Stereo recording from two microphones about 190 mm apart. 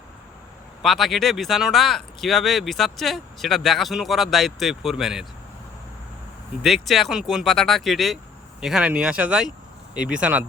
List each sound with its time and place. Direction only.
0.8 s speech: centre (ahead or behind)
6.6 s speech: centre (ahead or behind)